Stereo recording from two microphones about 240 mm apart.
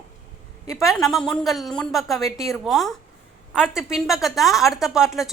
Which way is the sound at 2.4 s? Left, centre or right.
Centre.